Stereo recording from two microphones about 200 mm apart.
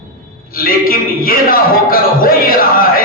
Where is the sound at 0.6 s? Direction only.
45° left (ahead or behind).